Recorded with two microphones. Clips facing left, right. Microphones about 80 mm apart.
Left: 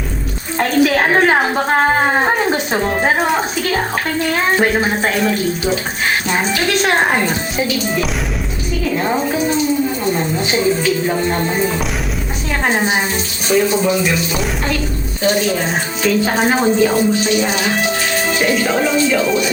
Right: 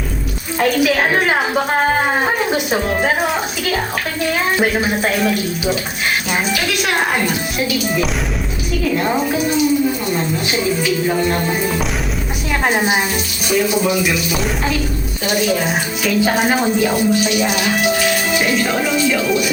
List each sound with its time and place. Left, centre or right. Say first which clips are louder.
0.6 s a woman's voice: left 1 dB; left
4.4 s speech: left 2 dB; left
11.1 s speech: even; centre
12.6 s music: even; centre
15.2 s music: left 2 dB; centre
16.0 s speech: left 1 dB; centre
16.8 s music: left 2 dB; centre
18.3 s speech: left 1 dB; centre